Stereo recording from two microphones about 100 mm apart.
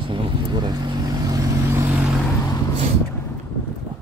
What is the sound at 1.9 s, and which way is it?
Vehicle, centre (ahead or behind).